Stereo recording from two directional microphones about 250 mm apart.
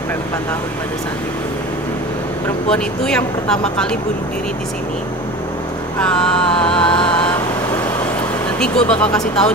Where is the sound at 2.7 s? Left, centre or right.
Centre.